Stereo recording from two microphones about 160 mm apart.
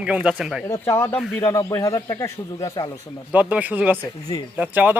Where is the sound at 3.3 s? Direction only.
10° right (ahead or behind).